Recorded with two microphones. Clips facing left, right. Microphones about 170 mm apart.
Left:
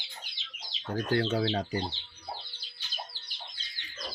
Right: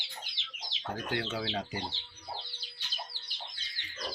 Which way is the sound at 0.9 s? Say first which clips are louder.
Left 7 dB; 35° left (ahead or behind).